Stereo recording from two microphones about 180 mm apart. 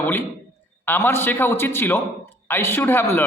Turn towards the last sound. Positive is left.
turn(degrees=10)  # may be behind; listen again after turning